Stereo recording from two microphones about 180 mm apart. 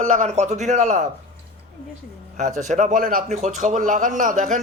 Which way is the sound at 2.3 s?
40° right (ahead or behind).